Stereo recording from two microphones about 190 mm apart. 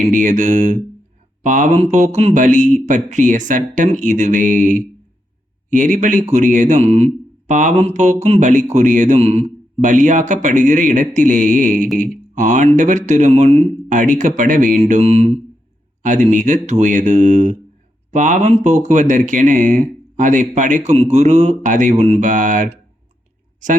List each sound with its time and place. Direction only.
0.1 s speech: 40° right (ahead or behind)